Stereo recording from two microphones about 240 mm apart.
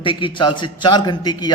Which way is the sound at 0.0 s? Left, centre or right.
Left.